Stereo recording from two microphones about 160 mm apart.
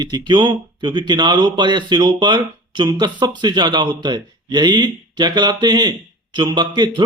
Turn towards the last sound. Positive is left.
turn(degrees=-25)  # may be behind; listen again after turning